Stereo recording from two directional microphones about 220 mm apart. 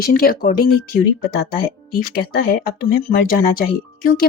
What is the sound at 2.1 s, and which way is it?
Speech, 45° left (ahead or behind).